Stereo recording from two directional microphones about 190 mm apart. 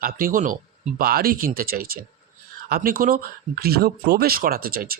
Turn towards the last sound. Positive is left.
turn(degrees=-50)  # may be behind; listen again after turning